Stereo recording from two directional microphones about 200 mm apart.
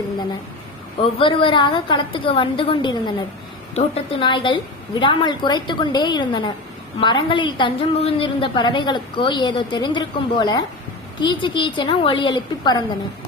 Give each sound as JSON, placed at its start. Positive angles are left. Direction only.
{"t": 1.2, "sound": "a woman's voice", "side_deg": 25}